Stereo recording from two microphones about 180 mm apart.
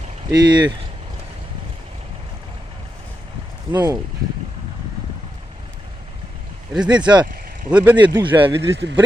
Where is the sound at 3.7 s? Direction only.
20° right (ahead or behind).